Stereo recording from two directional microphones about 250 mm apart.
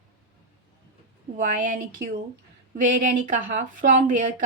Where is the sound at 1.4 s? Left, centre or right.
Right.